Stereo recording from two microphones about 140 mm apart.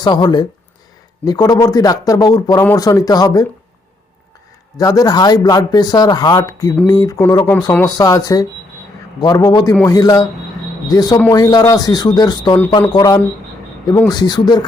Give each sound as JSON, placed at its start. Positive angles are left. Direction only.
{"t": 0.0, "sound": "speech", "side_deg": 30}
{"t": 4.8, "sound": "speech", "side_deg": 25}